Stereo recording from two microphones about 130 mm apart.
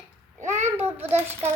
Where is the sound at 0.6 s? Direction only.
15° right (ahead or behind).